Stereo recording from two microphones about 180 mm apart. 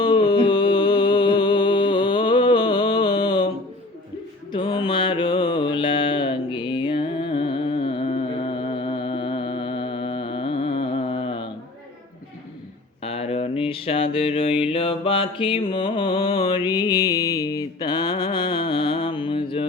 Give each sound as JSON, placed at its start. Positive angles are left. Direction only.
{"t": 0.0, "sound": "music", "side_deg": 25}
{"t": 4.5, "sound": "mantra", "side_deg": 25}
{"t": 13.0, "sound": "mantra", "side_deg": 35}